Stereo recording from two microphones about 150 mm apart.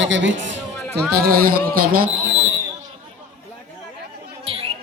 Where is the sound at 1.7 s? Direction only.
70° right (ahead or behind).